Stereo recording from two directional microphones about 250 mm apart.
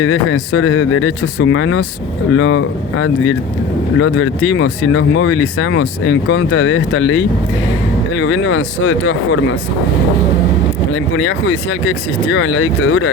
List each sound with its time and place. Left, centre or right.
0.0 s speech: left
10.9 s speech: left